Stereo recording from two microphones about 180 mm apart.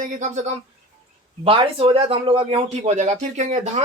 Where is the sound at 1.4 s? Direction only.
30° right (ahead or behind).